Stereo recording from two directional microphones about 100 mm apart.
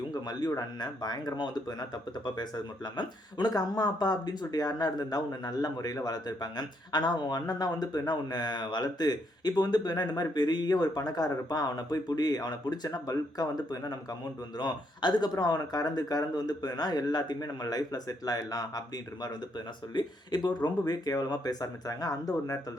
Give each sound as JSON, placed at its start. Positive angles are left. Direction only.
{"t": 0.1, "sound": "speech", "side_deg": 40}
{"t": 19.9, "sound": "speech", "side_deg": 45}